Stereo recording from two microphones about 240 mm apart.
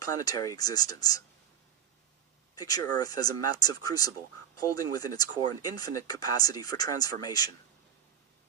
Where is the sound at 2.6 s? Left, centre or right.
Centre.